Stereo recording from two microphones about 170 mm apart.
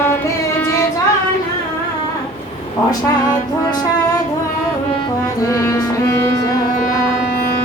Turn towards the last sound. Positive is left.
turn(degrees=20)  # may be behind; listen again after turning